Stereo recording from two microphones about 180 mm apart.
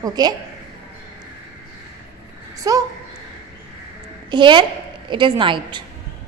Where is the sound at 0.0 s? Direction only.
20° right (ahead or behind).